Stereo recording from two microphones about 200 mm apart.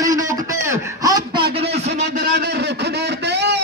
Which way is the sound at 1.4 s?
55° right (ahead or behind).